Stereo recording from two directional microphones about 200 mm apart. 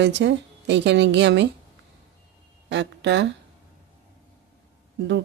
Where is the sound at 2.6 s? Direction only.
60° right (ahead or behind).